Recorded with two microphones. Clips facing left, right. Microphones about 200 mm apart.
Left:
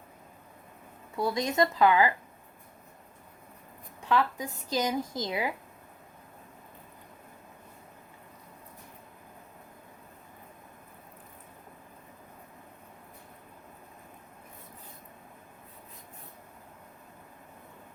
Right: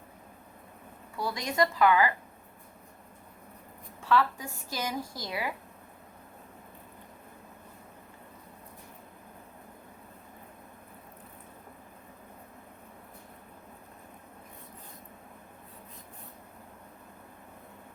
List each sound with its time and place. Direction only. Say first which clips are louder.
1.1 s a woman's voice: left 4 dB; 25° left (ahead or behind)
4.0 s a woman's voice: right 1 dB; 15° left (ahead or behind)